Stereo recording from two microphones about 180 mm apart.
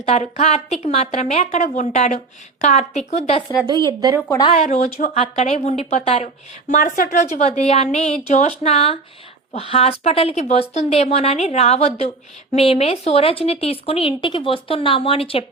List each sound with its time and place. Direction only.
0.0 s a woman's voice: 35° left (ahead or behind)
3.8 s speech: 20° right (ahead or behind)
4.3 s speech: 20° left (ahead or behind)
4.5 s a woman's voice: 40° left (ahead or behind)
6.7 s a woman's voice: 40° left (ahead or behind)